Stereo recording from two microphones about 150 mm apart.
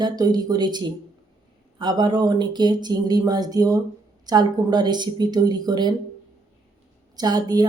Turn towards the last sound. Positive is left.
turn(degrees=-25)  # may be behind; listen again after turning